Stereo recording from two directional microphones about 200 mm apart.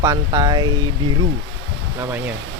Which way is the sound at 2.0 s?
10° right (ahead or behind).